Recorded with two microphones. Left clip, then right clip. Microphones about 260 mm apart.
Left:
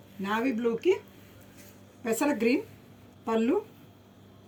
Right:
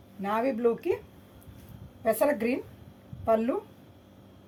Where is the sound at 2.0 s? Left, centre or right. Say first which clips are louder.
Right 1 dB; right.